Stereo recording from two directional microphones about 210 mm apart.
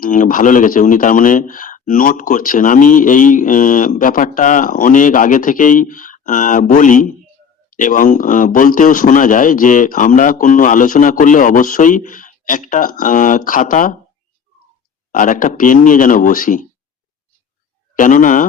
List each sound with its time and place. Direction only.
0.0 s speech: 40° left (ahead or behind)
15.1 s speech: 40° left (ahead or behind)
17.9 s speech: 40° left (ahead or behind)